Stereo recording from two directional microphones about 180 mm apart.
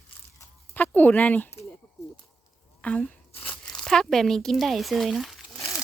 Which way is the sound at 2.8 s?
5° left (ahead or behind).